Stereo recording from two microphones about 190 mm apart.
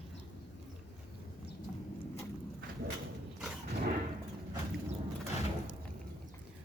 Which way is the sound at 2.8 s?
50° right (ahead or behind).